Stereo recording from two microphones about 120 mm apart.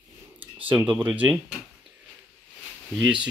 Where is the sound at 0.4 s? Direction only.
15° right (ahead or behind).